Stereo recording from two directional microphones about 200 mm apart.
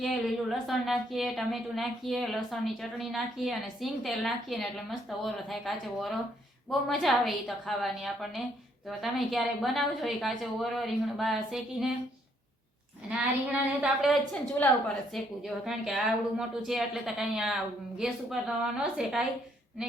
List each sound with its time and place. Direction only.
0.0 s a woman's voice: centre (ahead or behind)
13.1 s a woman's voice: 5° right (ahead or behind)
14.6 s a woman's voice: 10° left (ahead or behind)
15.1 s a woman's voice: centre (ahead or behind)